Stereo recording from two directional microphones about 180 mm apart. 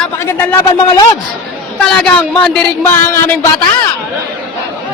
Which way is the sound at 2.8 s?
15° left (ahead or behind).